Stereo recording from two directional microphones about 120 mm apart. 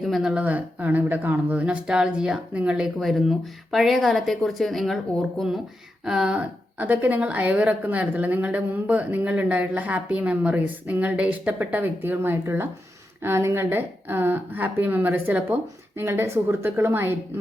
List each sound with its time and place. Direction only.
0.0 s a woman's voice: centre (ahead or behind)
6.1 s a woman's voice: 5° right (ahead or behind)